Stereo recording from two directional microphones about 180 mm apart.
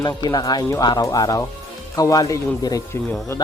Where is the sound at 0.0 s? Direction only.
20° left (ahead or behind).